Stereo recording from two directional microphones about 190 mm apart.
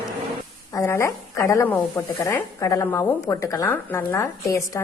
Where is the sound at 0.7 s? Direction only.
15° left (ahead or behind).